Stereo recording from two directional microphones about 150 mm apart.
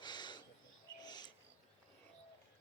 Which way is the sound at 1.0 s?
25° left (ahead or behind).